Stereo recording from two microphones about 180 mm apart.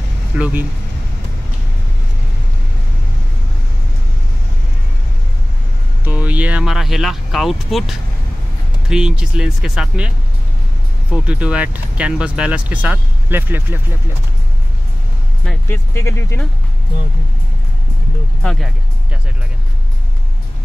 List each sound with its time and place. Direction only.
0.4 s speech: 5° right (ahead or behind)
6.0 s speech: 10° right (ahead or behind)
11.2 s speech: 5° right (ahead or behind)
15.4 s speech: 15° left (ahead or behind)
18.4 s speech: 5° left (ahead or behind)